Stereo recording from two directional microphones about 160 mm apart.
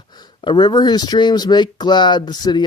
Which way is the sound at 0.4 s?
25° left (ahead or behind).